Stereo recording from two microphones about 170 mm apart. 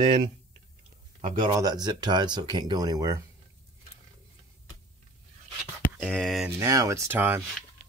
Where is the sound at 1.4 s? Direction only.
20° right (ahead or behind).